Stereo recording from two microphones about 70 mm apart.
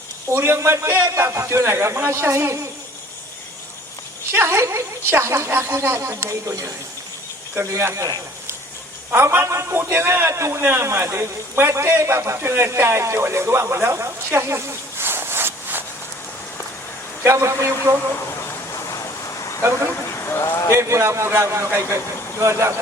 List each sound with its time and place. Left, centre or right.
0.3 s a man's voice: right
4.3 s a man's voice: right
9.1 s a man's voice: right
17.2 s a man's voice: right
18.7 s a sound: left
20.1 s a sound: left
20.7 s a man's voice: right